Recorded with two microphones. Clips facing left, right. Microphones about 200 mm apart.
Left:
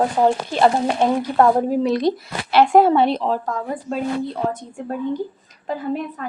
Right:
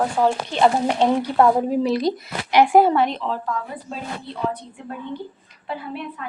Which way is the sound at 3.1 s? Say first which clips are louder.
Left 5 dB; 40° left (ahead or behind).